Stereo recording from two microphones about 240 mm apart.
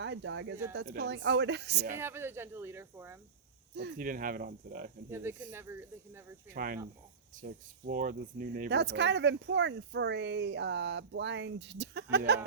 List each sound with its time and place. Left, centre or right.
0.0 s speech: right
2.0 s speech: centre
3.8 s cricket: right
5.1 s speech: centre
6.5 s cricket: right
7.4 s speech: right